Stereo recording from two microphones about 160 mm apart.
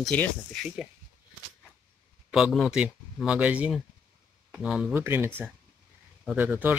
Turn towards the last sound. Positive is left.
turn(degrees=-10)  # may be behind; listen again after turning